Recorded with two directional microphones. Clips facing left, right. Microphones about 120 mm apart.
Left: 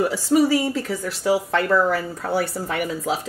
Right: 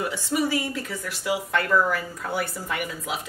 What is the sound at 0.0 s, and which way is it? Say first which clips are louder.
Speech: left 7 dB; 35° left (ahead or behind).